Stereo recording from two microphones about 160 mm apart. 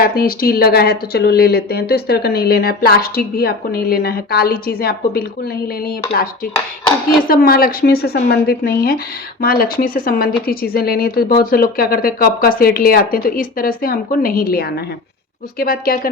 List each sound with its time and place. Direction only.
0.0 s speech: 65° left (ahead or behind)